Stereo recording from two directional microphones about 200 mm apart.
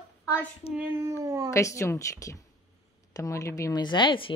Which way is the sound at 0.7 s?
10° right (ahead or behind).